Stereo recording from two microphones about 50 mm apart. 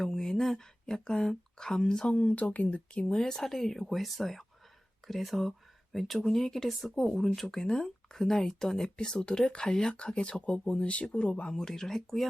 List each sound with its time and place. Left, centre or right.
0.0 s speech: centre
2.1 s speech: left; by 7.5 s centre
7.5 s speech: centre
11.5 s speech: centre